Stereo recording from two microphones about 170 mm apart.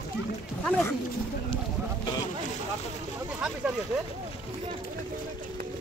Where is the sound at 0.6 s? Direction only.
10° left (ahead or behind).